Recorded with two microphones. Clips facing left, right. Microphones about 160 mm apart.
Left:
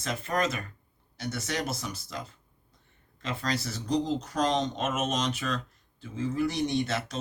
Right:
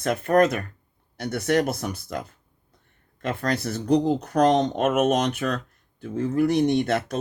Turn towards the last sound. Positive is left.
turn(degrees=-55)  # may be behind; listen again after turning